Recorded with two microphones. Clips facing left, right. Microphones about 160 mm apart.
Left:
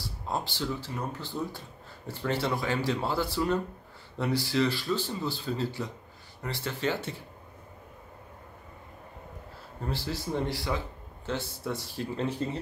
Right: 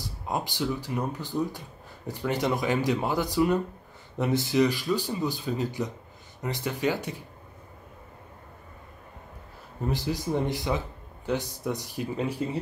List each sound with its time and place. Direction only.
0.0 s speech: 15° right (ahead or behind)
9.8 s speech: 15° right (ahead or behind)